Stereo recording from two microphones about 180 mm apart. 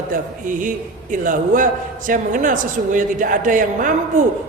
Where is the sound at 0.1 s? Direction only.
45° right (ahead or behind).